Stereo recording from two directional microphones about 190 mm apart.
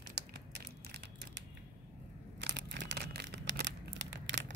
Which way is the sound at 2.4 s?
65° right (ahead or behind).